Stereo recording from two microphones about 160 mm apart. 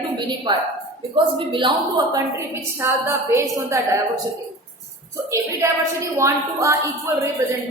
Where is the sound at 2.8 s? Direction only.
15° right (ahead or behind).